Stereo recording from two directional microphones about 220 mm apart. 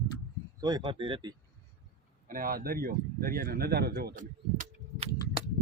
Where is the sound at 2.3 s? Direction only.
40° right (ahead or behind).